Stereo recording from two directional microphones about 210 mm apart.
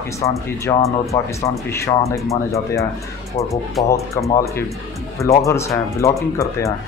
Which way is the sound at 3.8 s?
15° left (ahead or behind).